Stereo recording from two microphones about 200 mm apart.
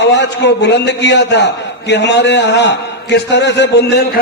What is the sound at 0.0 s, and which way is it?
A man's voice, 60° left (ahead or behind).